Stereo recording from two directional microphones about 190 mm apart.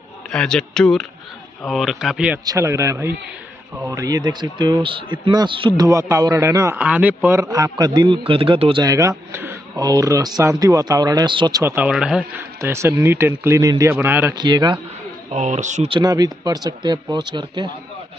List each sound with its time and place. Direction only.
0.3 s speech: 5° left (ahead or behind)
2.4 s a man's voice: 15° right (ahead or behind)
12.5 s speech: 15° right (ahead or behind)
14.3 s a man's voice: 25° right (ahead or behind)
15.3 s speech: 40° right (ahead or behind)
15.9 s a man's voice: 20° right (ahead or behind)